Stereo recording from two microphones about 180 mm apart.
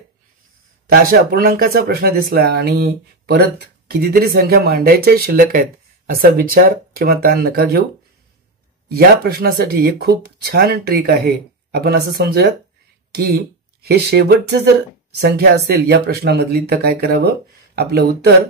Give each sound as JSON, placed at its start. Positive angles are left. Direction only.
{"t": 1.0, "sound": "speech", "side_deg": -55}
{"t": 8.8, "sound": "speech", "side_deg": -60}